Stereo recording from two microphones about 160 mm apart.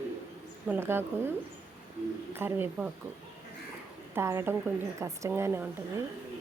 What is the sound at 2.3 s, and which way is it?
Speech, 15° right (ahead or behind).